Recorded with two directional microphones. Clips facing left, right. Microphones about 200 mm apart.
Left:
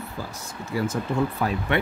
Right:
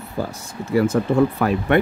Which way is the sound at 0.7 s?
60° right (ahead or behind).